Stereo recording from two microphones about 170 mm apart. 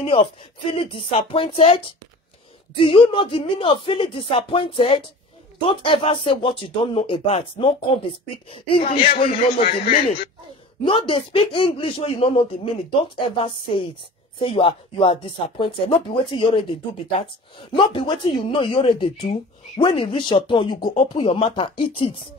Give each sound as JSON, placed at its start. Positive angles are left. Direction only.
{"t": 0.0, "sound": "speech", "side_deg": 30}
{"t": 9.7, "sound": "a man's voice", "side_deg": 55}
{"t": 10.8, "sound": "speech", "side_deg": 30}